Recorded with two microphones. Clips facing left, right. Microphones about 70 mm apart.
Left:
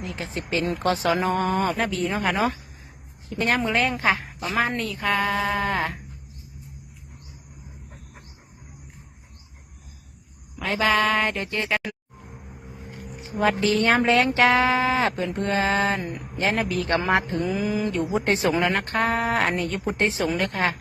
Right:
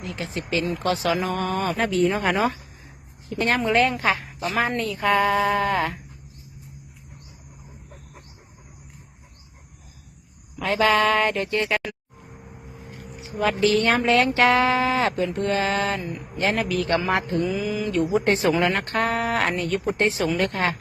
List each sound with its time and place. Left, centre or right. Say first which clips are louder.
0.0 s speech: right 1 dB; centre
1.1 s speech: left 2 dB; left
1.7 s speech: right 4 dB; centre
3.8 s mantra: right 2 dB; centre
4.5 s speech: even; centre
10.6 s speech: right 2 dB; centre
13.3 s mantra: right 1 dB; centre
16.0 s speech: even; left
16.5 s speech: right 1 dB; left
17.4 s mantra: even; left
18.3 s mantra: right 1 dB; centre
19.5 s speech: right 1 dB; centre
20.5 s speech: even; centre